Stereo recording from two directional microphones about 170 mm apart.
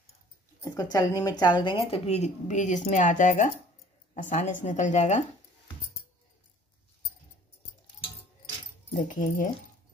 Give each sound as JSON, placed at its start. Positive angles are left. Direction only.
{"t": 0.6, "sound": "a woman's voice", "side_deg": 20}
{"t": 8.9, "sound": "a woman's voice", "side_deg": 50}